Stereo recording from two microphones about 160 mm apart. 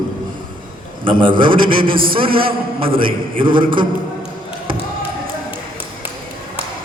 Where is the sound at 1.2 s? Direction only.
30° right (ahead or behind).